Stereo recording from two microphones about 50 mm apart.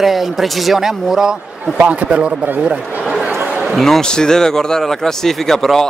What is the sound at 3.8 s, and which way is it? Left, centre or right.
Speech, centre.